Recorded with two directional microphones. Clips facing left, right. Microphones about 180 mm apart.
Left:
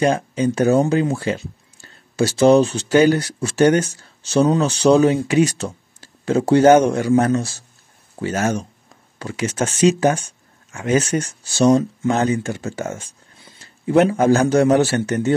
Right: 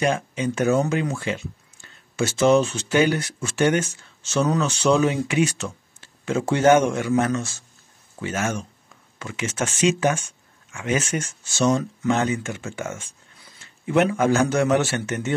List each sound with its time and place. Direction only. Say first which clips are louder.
0.0 s speech: left 5 dB; 35° left (ahead or behind)